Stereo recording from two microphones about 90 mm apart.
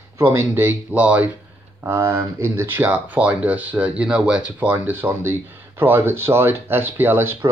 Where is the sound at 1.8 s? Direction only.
30° right (ahead or behind).